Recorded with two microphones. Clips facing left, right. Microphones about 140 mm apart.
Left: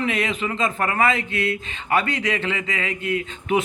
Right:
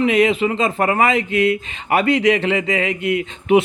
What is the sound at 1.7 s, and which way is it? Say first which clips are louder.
Speech: right 3 dB; 35° right (ahead or behind).